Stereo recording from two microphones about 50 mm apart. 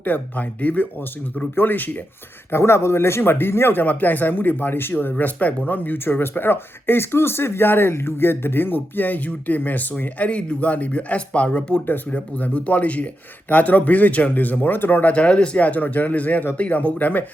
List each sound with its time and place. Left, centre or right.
0.0 s speech: left
2.5 s speech: left
15.1 s speech: left
15.6 s speech: left